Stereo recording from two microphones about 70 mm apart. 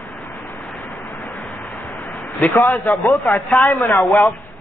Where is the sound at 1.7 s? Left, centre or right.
Left.